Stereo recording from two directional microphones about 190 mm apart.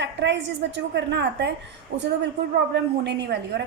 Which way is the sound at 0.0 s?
65° right (ahead or behind).